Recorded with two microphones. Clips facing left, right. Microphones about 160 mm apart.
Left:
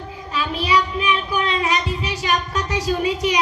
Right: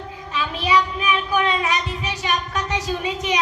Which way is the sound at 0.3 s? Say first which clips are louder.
Even; 35° left (ahead or behind).